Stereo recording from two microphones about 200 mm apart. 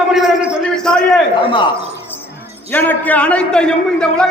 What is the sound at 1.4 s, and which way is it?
Speech, 25° left (ahead or behind).